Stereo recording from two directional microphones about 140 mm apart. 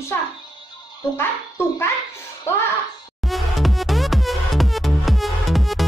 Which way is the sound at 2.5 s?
20° left (ahead or behind).